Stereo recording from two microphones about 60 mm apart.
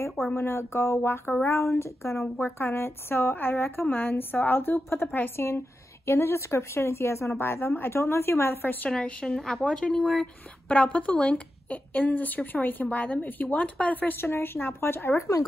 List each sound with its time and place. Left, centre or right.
0.4 s speech: left
1.4 s speech: left
2.3 s a woman's voice: left
8.9 s speech: centre
10.7 s a woman's voice: left
14.1 s a woman's voice: left